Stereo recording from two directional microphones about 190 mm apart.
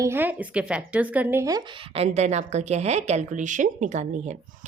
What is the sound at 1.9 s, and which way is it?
A woman's voice, 35° right (ahead or behind).